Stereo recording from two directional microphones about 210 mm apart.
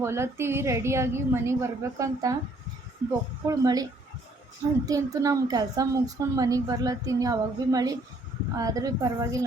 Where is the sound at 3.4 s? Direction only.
15° right (ahead or behind).